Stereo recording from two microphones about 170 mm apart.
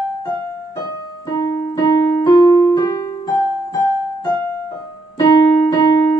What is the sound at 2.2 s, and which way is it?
Keyboard, 20° left (ahead or behind).